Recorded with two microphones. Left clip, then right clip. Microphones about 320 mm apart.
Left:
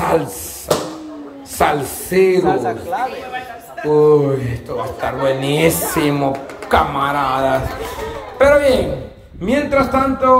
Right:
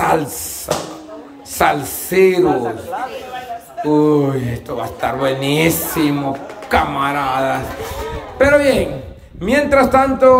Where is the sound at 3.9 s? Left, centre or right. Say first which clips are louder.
Left 2 dB; centre.